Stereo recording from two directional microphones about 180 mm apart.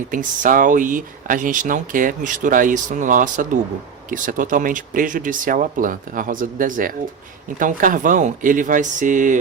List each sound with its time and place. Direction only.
0.1 s speech: 50° right (ahead or behind)